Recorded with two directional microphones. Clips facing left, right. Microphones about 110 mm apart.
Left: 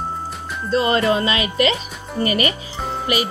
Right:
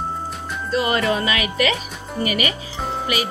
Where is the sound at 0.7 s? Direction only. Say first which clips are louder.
Left 3 dB; 30° left (ahead or behind).